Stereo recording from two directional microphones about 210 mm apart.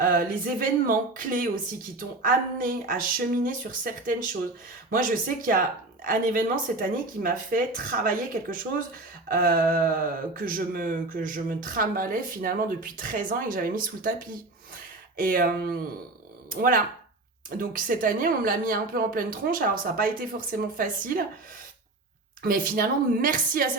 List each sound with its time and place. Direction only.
0.0 s speech: 45° right (ahead or behind)
2.6 s speech: 40° right (ahead or behind)
15.1 s speech: 45° right (ahead or behind)
22.4 s speech: 40° right (ahead or behind)